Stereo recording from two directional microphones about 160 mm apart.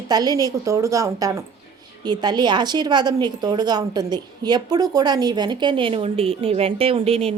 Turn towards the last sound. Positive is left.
turn(degrees=-40)  # may be behind; listen again after turning